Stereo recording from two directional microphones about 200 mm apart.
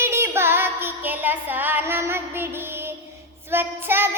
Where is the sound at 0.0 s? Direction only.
10° right (ahead or behind).